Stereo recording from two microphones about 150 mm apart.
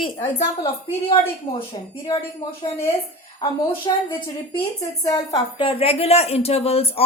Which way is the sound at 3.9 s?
25° left (ahead or behind).